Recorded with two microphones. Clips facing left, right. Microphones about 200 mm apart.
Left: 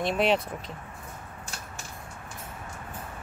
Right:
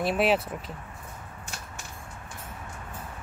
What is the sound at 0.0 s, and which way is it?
Speech, 5° right (ahead or behind).